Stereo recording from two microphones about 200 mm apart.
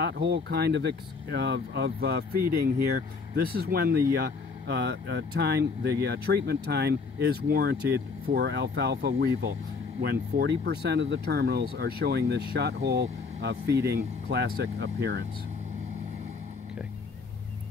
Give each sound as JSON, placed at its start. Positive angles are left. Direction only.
{"t": 0.0, "sound": "speech", "side_deg": -60}